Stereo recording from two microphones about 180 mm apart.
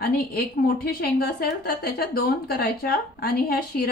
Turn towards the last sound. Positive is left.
turn(degrees=60)  # may be behind; listen again after turning